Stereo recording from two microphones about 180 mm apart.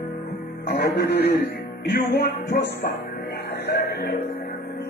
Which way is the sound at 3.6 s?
65° left (ahead or behind).